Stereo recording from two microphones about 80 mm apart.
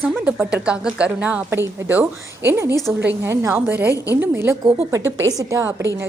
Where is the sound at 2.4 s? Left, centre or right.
Right.